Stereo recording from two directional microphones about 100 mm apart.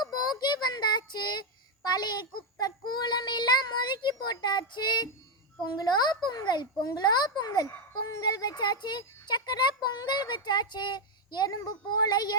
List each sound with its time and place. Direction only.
0.0 s child singing: 45° left (ahead or behind)
1.9 s a child's voice: 45° left (ahead or behind)